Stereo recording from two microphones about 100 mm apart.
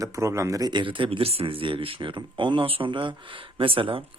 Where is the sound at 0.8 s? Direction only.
55° right (ahead or behind).